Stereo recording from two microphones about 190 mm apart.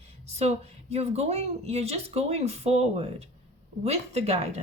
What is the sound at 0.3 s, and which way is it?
A woman's voice, 35° right (ahead or behind).